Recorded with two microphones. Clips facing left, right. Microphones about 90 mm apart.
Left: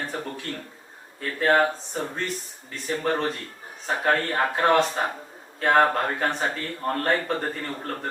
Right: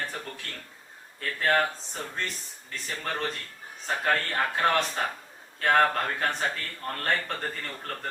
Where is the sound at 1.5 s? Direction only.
25° left (ahead or behind).